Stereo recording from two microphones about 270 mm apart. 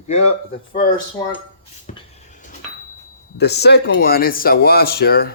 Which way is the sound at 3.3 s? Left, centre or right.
Left.